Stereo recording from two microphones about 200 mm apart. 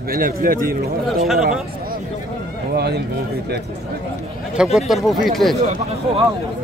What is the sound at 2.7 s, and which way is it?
Speech, 55° right (ahead or behind).